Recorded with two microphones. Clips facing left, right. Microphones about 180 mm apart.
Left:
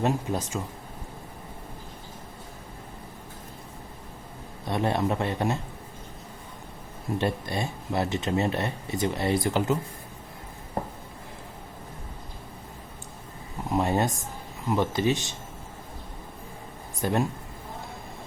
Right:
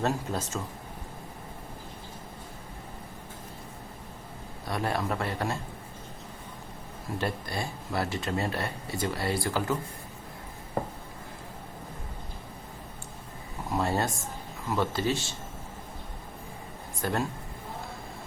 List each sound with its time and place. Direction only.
0.0 s speech: 15° left (ahead or behind)
4.6 s speech: 25° left (ahead or behind)
7.2 s speech: 20° left (ahead or behind)
13.7 s speech: 20° left (ahead or behind)
17.0 s speech: 20° left (ahead or behind)